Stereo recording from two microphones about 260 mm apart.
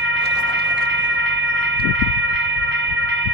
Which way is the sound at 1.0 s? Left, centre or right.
Right.